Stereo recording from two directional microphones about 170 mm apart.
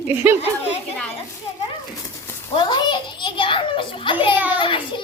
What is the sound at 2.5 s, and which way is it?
A child's voice, 25° left (ahead or behind).